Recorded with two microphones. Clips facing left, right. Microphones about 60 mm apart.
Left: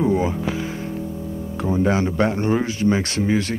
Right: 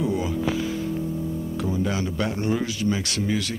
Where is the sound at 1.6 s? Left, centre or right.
Left.